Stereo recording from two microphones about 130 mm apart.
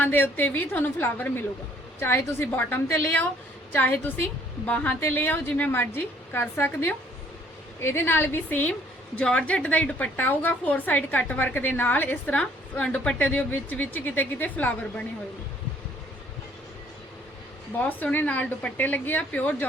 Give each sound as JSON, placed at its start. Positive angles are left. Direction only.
{"t": 0.0, "sound": "a woman's voice", "side_deg": 15}
{"t": 17.7, "sound": "a woman's voice", "side_deg": 15}